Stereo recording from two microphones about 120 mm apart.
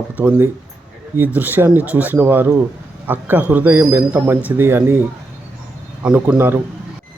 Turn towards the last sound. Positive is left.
turn(degrees=-15)  # may be behind; listen again after turning